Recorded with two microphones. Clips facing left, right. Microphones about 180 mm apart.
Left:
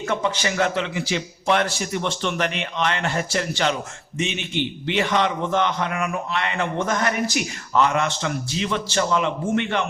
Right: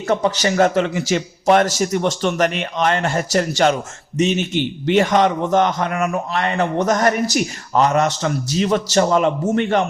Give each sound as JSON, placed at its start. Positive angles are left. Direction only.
{"t": 0.1, "sound": "a man's voice", "side_deg": -40}